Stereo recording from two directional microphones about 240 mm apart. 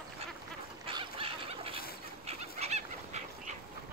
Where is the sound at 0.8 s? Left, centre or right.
Right.